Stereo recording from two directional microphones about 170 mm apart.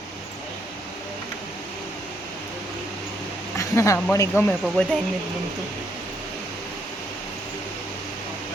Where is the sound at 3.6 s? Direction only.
15° left (ahead or behind).